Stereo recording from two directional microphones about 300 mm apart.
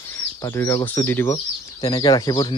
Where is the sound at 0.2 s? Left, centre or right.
Centre.